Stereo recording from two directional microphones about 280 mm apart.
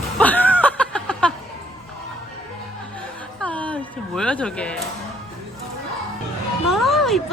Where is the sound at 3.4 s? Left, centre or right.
Centre.